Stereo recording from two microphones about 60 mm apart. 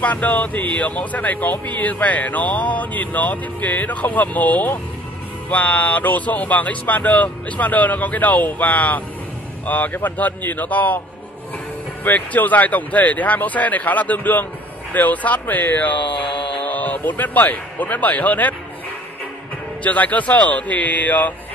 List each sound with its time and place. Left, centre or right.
0.0 s speech: left
12.0 s speech: left
19.8 s speech: left